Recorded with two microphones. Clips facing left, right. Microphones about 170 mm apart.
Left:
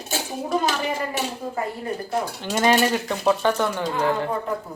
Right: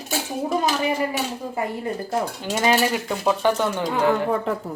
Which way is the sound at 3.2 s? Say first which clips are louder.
Even; 15° right (ahead or behind).